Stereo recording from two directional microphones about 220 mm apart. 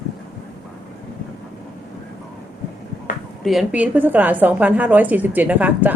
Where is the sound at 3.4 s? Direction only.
Centre (ahead or behind).